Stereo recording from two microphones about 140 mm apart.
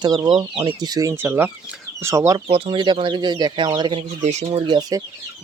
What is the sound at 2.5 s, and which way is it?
Speech, 40° right (ahead or behind).